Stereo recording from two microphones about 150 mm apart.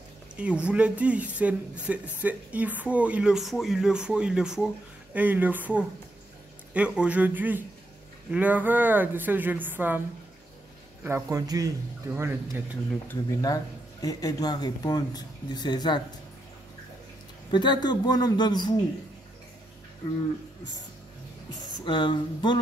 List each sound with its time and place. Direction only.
0.4 s speech: 10° right (ahead or behind)
11.1 s speech: 20° right (ahead or behind)
13.1 s speech: 20° left (ahead or behind)
17.5 s speech: 30° left (ahead or behind)
21.8 s speech: 30° left (ahead or behind)